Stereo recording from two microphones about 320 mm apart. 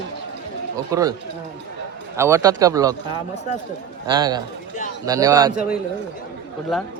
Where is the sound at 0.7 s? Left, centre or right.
Centre.